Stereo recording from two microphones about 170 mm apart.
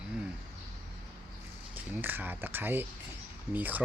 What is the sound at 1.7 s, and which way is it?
Speech, 10° right (ahead or behind).